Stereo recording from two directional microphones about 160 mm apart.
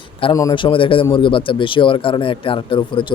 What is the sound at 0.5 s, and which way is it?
A man's voice, 30° left (ahead or behind).